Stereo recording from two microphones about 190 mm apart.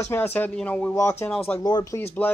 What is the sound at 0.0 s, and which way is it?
Speech, 10° left (ahead or behind).